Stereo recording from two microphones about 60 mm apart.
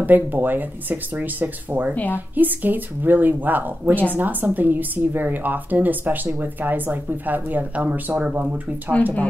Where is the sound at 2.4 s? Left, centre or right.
Right.